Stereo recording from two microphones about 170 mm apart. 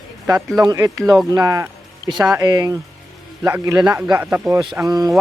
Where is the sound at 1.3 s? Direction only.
20° right (ahead or behind).